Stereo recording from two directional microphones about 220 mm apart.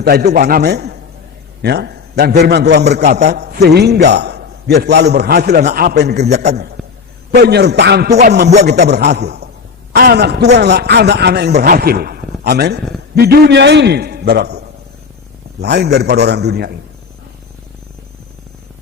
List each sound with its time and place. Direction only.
0.0 s a man's voice: 45° right (ahead or behind)
3.0 s a man's voice: 30° right (ahead or behind)
3.2 s a man's voice: 50° right (ahead or behind)
6.8 s a sound: centre (ahead or behind)
7.3 s a man's voice: 45° right (ahead or behind)
15.6 s a man's voice: 50° right (ahead or behind)